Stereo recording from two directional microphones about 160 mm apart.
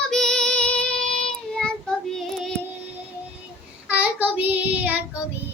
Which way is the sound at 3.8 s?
10° right (ahead or behind).